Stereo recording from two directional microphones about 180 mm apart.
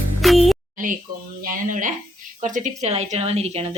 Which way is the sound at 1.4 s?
45° right (ahead or behind).